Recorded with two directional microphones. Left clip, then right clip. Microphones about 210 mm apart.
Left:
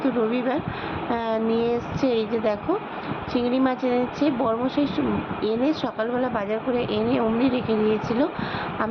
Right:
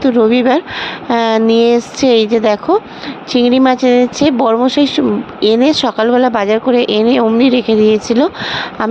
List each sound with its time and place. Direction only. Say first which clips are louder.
0.0 s speech: right 13 dB; 45° right (ahead or behind)